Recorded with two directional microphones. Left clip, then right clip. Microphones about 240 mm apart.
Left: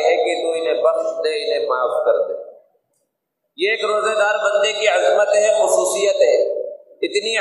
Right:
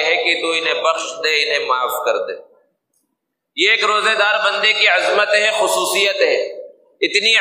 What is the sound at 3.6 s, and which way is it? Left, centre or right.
A man's voice, right.